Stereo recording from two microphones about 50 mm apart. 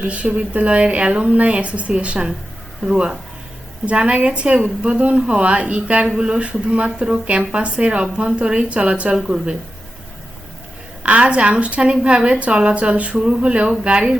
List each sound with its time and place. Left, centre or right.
0.0 s a woman's voice: right
11.0 s a woman's voice: right